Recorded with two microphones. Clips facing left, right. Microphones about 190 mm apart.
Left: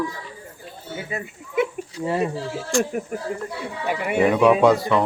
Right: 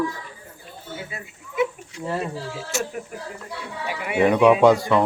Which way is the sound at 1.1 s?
55° left (ahead or behind).